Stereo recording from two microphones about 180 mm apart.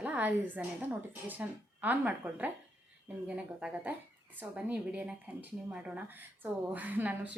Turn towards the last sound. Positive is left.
turn(degrees=-10)  # may be behind; listen again after turning